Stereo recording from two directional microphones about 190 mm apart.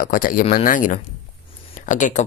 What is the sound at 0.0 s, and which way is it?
Speech, 45° left (ahead or behind).